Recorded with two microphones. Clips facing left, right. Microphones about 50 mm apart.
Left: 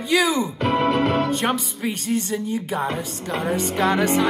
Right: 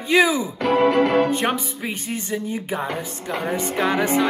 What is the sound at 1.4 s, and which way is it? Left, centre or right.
Speech, centre.